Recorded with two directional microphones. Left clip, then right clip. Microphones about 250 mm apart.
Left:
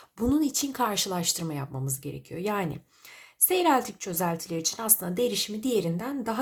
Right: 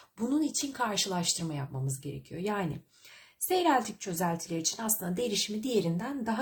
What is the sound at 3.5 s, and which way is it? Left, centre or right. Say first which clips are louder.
A woman's voice: left 3 dB; centre.